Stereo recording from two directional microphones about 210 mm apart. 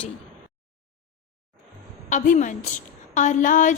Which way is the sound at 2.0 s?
35° left (ahead or behind).